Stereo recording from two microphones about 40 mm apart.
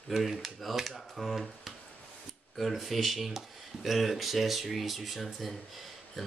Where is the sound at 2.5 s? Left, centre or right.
Centre.